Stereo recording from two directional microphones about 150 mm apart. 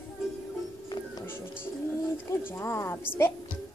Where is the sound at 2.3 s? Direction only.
15° left (ahead or behind).